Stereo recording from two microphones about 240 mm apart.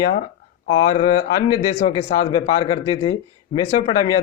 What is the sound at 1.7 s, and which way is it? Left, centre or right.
Speech, left.